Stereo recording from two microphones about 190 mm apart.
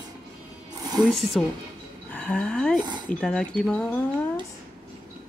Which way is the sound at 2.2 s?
5° left (ahead or behind).